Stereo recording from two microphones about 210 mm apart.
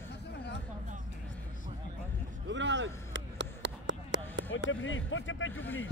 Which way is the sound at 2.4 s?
60° right (ahead or behind).